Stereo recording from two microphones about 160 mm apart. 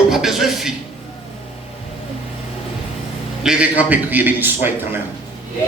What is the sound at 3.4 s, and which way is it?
A man's voice, 10° right (ahead or behind).